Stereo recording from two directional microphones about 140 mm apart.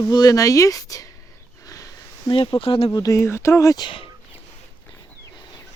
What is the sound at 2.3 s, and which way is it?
Speech, 40° left (ahead or behind).